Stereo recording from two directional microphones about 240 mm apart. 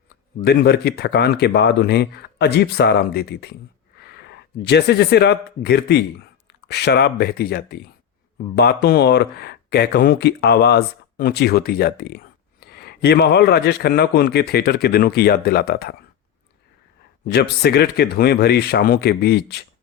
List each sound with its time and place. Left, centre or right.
0.4 s speech: left
17.2 s speech: left